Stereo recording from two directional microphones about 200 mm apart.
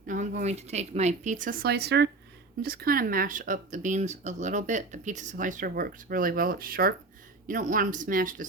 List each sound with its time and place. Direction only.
0.1 s speech: 40° right (ahead or behind)